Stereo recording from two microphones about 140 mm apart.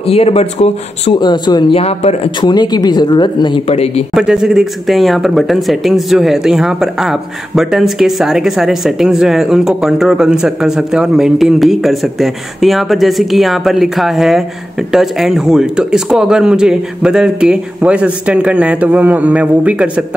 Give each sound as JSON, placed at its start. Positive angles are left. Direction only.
{"t": 0.0, "sound": "speech", "side_deg": 45}
{"t": 1.2, "sound": "speech", "side_deg": 30}
{"t": 1.8, "sound": "speech", "side_deg": 45}
{"t": 2.4, "sound": "speech", "side_deg": 30}
{"t": 3.6, "sound": "speech", "side_deg": 50}
{"t": 4.1, "sound": "speech", "side_deg": -5}